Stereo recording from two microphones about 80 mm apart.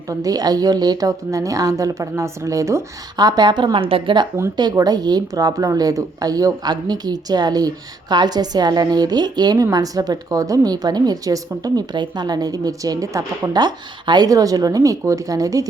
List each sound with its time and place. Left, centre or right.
0.1 s a woman's voice: right
3.2 s a woman's voice: right
4.7 s a woman's voice: right
13.5 s a woman's voice: right